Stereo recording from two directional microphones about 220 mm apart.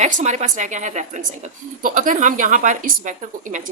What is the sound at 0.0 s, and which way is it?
A woman's voice, 30° right (ahead or behind).